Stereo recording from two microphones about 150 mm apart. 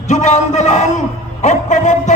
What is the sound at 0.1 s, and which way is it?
A man's voice, 55° left (ahead or behind).